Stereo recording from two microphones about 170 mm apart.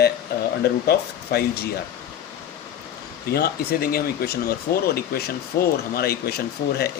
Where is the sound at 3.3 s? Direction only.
65° left (ahead or behind).